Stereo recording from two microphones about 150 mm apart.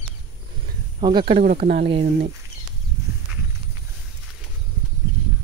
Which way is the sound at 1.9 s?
40° right (ahead or behind).